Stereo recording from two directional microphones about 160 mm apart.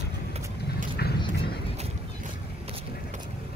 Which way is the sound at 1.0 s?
80° left.